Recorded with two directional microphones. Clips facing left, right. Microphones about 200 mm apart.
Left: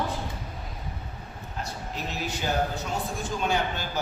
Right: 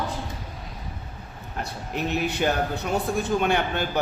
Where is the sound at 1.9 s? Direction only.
60° right (ahead or behind).